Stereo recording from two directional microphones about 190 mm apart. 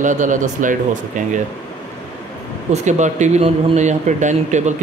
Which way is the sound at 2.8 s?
40° right (ahead or behind).